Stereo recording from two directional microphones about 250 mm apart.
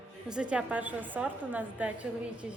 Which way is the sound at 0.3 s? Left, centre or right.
Centre.